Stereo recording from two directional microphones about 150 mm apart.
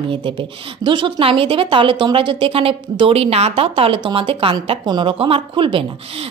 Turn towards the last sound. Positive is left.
turn(degrees=-35)  # may be behind; listen again after turning